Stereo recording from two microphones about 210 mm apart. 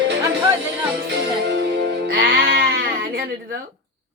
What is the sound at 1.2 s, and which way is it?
Music, 55° right (ahead or behind).